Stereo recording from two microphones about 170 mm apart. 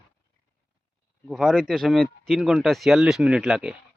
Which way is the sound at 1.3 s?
Centre (ahead or behind).